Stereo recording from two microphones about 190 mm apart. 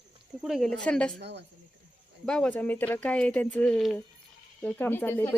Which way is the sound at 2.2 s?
5° left (ahead or behind).